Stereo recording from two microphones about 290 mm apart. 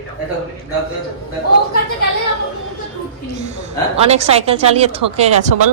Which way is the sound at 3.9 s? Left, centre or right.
Right.